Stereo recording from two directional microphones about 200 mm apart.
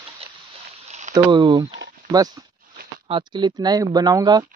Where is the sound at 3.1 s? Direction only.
20° right (ahead or behind).